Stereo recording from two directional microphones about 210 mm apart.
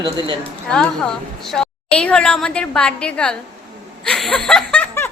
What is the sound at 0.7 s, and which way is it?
A woman's voice, 5° left (ahead or behind).